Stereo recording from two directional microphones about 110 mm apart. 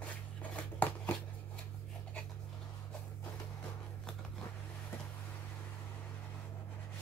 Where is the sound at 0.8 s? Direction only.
15° left (ahead or behind).